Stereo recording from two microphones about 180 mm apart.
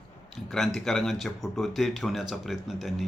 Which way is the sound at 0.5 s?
Centre (ahead or behind).